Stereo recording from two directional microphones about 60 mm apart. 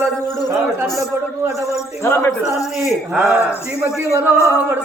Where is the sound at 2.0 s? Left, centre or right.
Left.